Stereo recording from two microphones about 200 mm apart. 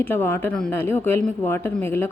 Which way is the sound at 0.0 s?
10° left (ahead or behind).